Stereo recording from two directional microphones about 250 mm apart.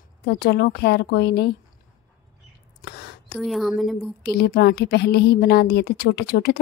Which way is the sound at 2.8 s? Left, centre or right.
Left.